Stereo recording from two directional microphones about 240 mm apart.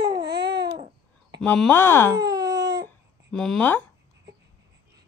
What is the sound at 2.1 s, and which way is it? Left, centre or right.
Baby cry, centre.